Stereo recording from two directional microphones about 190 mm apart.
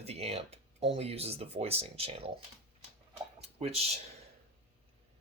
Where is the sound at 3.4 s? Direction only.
35° right (ahead or behind).